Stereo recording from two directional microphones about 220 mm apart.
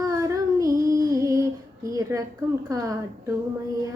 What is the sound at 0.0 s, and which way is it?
Child singing, 15° right (ahead or behind).